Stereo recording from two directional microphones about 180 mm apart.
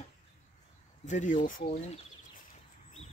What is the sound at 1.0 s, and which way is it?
Speech, 45° left (ahead or behind).